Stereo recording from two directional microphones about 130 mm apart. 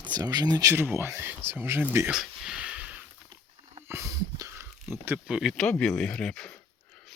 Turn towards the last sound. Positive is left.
turn(degrees=5)  # may be behind; listen again after turning